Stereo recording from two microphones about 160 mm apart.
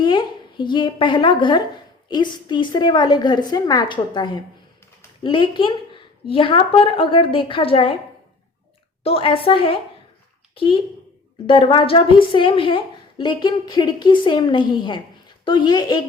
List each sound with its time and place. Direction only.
0.0 s a woman's voice: 30° left (ahead or behind)
9.0 s a woman's voice: 35° left (ahead or behind)